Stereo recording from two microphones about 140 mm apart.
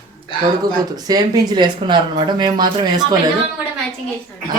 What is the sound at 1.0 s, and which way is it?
Speech, 30° right (ahead or behind).